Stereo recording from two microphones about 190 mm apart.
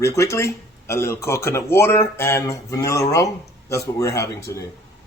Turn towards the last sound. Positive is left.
turn(degrees=15)  # may be behind; listen again after turning